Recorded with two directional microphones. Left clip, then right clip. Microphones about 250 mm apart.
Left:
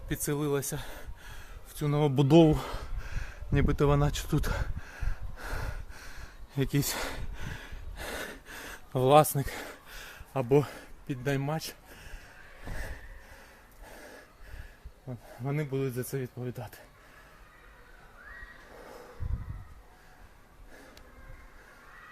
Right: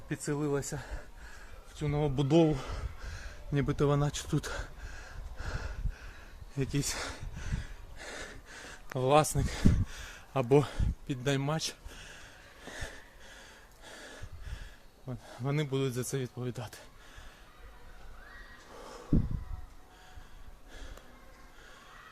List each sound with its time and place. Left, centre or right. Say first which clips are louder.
0.1 s speech: left 2 dB; left
1.7 s a sound: left 4 dB; left
9.1 s speech: left 4 dB; centre
9.8 s speech: even; centre
13.9 s gasp: even; centre
15.0 s speech: even; centre